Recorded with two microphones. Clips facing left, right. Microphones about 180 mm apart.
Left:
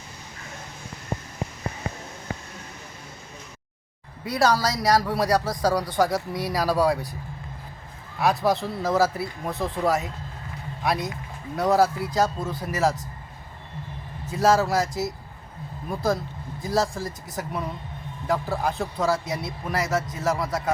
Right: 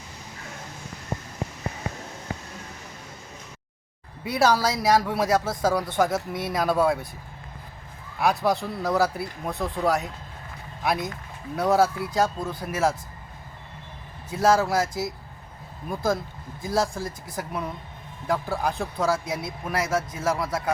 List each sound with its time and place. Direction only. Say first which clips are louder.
4.2 s speech: even; 5° right (ahead or behind)
8.2 s speech: left 1 dB; centre (ahead or behind)
14.3 s speech: even; centre (ahead or behind)
16.6 s speech: left 1 dB; centre (ahead or behind)